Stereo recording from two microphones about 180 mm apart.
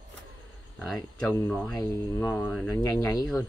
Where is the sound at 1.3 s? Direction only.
15° left (ahead or behind).